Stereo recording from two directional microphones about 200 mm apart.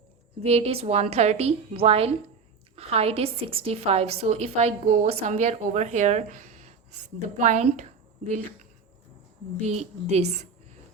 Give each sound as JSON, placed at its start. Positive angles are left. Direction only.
{"t": 0.4, "sound": "a woman's voice", "side_deg": -30}
{"t": 9.6, "sound": "a woman's voice", "side_deg": -35}